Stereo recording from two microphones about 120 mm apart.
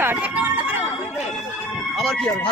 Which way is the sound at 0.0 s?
15° right (ahead or behind).